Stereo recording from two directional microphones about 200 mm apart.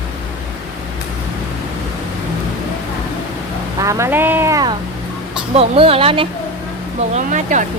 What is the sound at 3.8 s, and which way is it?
Speech, 15° right (ahead or behind).